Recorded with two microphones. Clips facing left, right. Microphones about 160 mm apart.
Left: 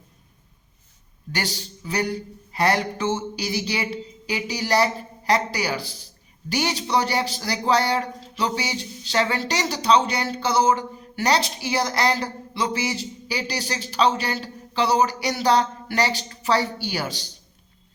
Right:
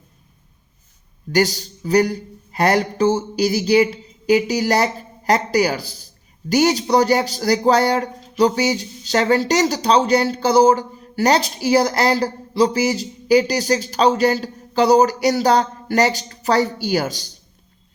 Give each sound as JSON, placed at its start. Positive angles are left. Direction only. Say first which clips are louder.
{"t": 1.3, "sound": "a man's voice", "louder": "right 11 dB", "side_deg": -40}